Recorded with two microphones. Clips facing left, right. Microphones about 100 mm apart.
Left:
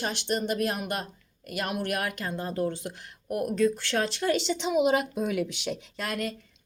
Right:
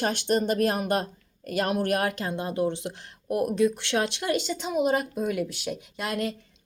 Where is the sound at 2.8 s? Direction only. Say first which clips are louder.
Right 3 dB; 30° right (ahead or behind); by 6.1 s 10° right (ahead or behind).